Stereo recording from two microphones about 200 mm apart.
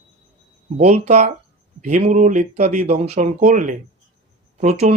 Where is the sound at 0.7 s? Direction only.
30° right (ahead or behind).